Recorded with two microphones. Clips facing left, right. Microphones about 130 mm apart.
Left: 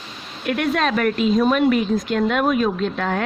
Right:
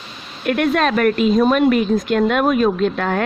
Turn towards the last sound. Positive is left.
turn(degrees=-50)  # may be behind; listen again after turning